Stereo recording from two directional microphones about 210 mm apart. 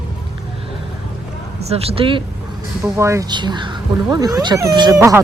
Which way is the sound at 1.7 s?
30° right (ahead or behind).